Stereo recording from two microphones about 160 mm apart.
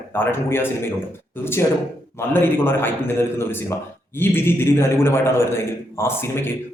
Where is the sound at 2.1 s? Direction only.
15° left (ahead or behind).